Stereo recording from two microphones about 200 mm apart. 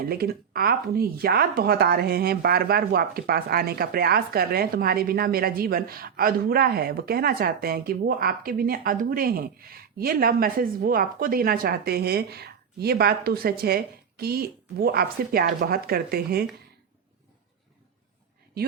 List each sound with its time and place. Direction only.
0.0 s speech: 50° right (ahead or behind)